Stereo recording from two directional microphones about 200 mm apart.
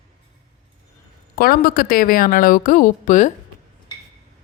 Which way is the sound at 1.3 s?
45° left (ahead or behind).